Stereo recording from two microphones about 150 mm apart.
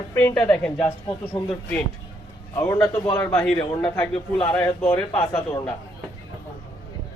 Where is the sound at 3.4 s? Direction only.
5° left (ahead or behind).